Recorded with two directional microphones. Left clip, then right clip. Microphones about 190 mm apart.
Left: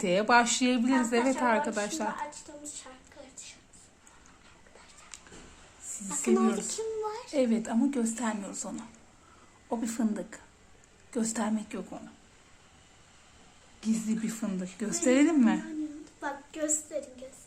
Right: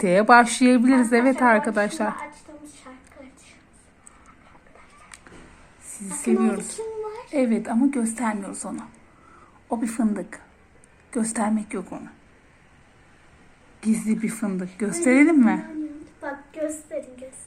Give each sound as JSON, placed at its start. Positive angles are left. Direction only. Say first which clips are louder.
{"t": 0.0, "sound": "a woman's voice", "louder": "right 9 dB", "side_deg": -25}
{"t": 6.1, "sound": "speech", "louder": "right 4 dB", "side_deg": 10}
{"t": 6.7, "sound": "child singing", "louder": "right 2 dB", "side_deg": 15}
{"t": 7.3, "sound": "a woman's voice", "louder": "right 6 dB", "side_deg": -5}
{"t": 13.8, "sound": "a woman's voice", "louder": "right 7 dB", "side_deg": -10}